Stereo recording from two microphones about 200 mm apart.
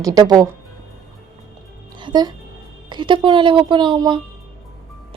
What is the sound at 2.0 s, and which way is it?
A woman's voice, 20° right (ahead or behind).